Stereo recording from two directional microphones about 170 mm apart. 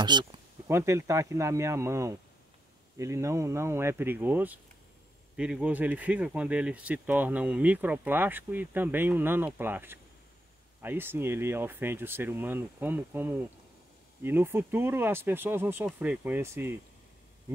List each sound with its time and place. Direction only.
0.0 s speech: 25° right (ahead or behind)
0.7 s speech: 15° right (ahead or behind)